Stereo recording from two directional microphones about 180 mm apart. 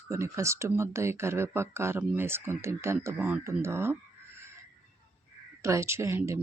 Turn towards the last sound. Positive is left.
turn(degrees=-15)  # may be behind; listen again after turning